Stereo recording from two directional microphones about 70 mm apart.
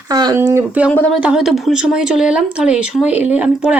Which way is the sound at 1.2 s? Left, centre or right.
Centre.